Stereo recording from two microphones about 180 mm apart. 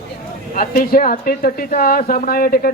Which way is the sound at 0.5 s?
55° left (ahead or behind).